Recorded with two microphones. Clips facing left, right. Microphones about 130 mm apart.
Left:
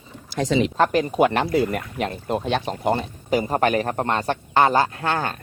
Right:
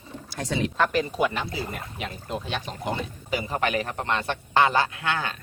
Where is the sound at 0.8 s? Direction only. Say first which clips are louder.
Left 4 dB; 40° left (ahead or behind).